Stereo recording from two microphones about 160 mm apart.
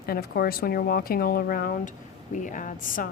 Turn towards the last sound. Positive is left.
turn(degrees=55)  # may be behind; listen again after turning